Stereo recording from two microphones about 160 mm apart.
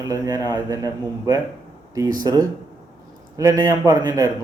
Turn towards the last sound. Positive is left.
turn(degrees=-20)  # may be behind; listen again after turning